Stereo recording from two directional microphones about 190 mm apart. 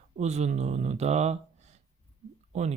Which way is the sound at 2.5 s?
35° right (ahead or behind).